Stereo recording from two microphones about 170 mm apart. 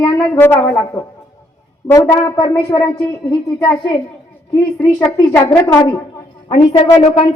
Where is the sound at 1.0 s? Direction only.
35° left (ahead or behind).